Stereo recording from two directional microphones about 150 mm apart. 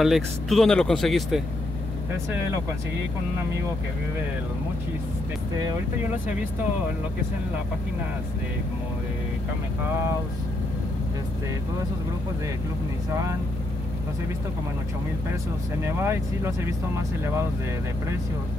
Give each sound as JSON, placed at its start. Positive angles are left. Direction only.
{"t": 0.0, "sound": "speech", "side_deg": 0}
{"t": 15.8, "sound": "speech", "side_deg": -15}